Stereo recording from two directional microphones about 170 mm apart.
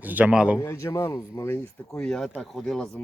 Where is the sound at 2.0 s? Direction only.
5° left (ahead or behind).